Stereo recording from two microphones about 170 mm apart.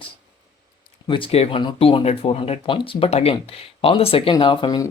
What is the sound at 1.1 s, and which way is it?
Speech, 35° left (ahead or behind).